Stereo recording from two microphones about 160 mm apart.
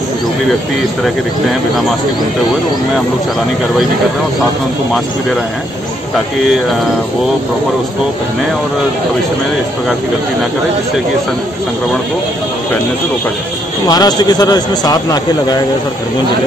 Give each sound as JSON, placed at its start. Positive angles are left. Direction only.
{"t": 13.8, "sound": "a man's voice", "side_deg": 25}